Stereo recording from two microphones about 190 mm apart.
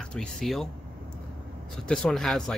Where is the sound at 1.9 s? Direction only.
Centre (ahead or behind).